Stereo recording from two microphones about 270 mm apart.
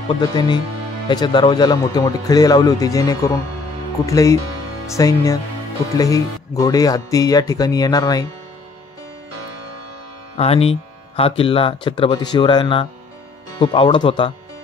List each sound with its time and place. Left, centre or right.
0.3 s speech: centre
10.3 s speech: left